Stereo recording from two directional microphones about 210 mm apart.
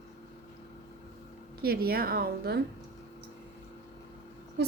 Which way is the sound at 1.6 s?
45° right (ahead or behind).